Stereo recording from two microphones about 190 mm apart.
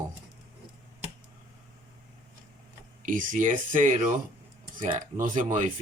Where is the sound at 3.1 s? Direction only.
45° right (ahead or behind).